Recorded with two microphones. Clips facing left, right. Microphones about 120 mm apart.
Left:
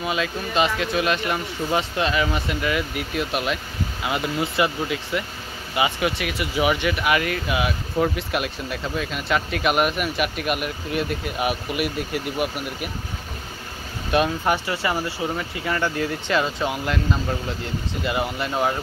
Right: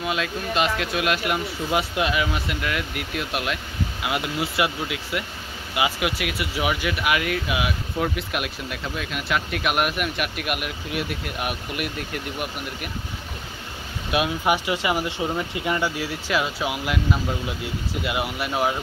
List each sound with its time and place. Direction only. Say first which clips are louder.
0.0 s speech: left 1 dB; centre (ahead or behind)
14.1 s speech: left 1 dB; 10° right (ahead or behind)
16.0 s speech: left 2 dB; 5° right (ahead or behind)